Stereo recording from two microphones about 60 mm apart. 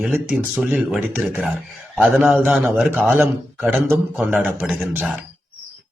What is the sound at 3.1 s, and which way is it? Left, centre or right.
Speech, right.